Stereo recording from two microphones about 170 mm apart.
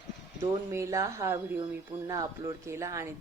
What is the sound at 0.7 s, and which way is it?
Speech, 20° right (ahead or behind).